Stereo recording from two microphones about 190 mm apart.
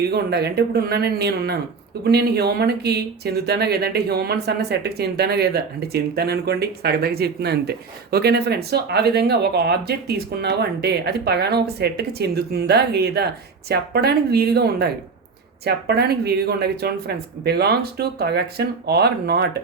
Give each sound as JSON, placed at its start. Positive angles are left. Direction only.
{"t": 0.0, "sound": "speech", "side_deg": -55}